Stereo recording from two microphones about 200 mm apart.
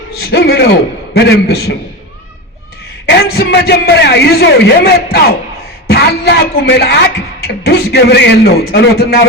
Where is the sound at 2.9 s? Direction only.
55° left (ahead or behind).